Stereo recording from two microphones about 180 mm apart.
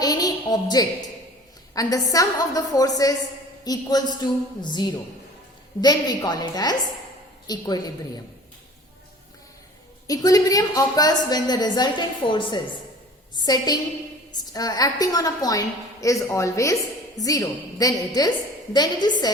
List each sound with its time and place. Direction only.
0.0 s a sound: 20° left (ahead or behind)
1.7 s a woman's voice: 20° left (ahead or behind)
10.1 s a woman's voice: 20° left (ahead or behind)